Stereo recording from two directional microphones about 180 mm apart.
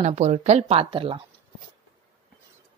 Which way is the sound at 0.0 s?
40° right (ahead or behind).